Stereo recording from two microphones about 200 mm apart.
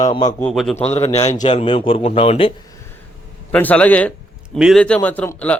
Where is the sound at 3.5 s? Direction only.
5° left (ahead or behind).